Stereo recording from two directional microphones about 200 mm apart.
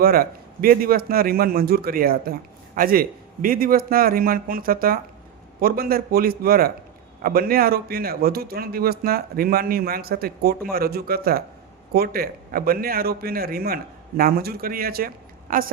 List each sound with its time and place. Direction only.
0.0 s a man's voice: 50° right (ahead or behind)